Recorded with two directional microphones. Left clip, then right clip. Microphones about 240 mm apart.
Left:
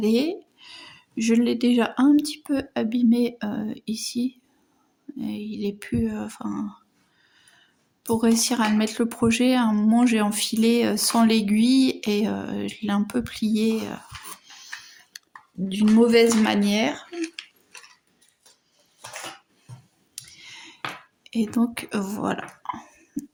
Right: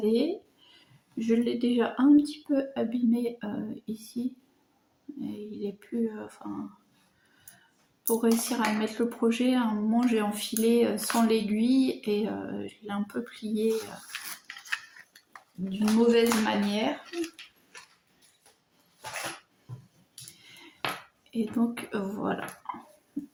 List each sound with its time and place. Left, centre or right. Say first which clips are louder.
0.0 s speech: left 3 dB; left
5.2 s speech: left 6 dB; left
8.0 s speech: left 4 dB; left
15.1 s a sound: left 13 dB; left
15.7 s speech: left 5 dB; left
20.2 s clicking: left 6 dB; left
21.2 s speech: left 5 dB; left